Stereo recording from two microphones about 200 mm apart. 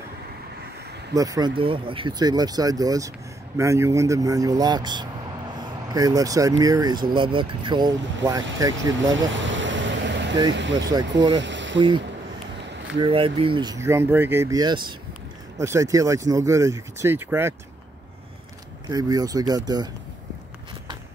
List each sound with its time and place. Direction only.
1.1 s speech: 15° right (ahead or behind)
5.6 s vehicle: 20° right (ahead or behind)
6.6 s speech: 20° right (ahead or behind)
8.9 s speech: 70° right (ahead or behind)
9.3 s vehicle: 70° right (ahead or behind)
10.5 s speech: 65° right (ahead or behind)
11.3 s boat: 65° right (ahead or behind)
12.5 s a sound: 60° right (ahead or behind)
13.0 s speech: 25° right (ahead or behind); by 17.6 s 10° right (ahead or behind)
18.9 s speech: 20° right (ahead or behind)